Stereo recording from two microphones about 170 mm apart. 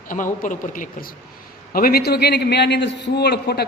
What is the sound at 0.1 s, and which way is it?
Speech, 50° left (ahead or behind).